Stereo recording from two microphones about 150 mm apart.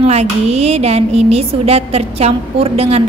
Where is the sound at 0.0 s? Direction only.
45° right (ahead or behind).